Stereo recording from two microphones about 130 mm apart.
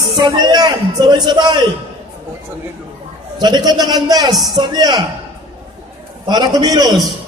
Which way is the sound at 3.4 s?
30° right (ahead or behind).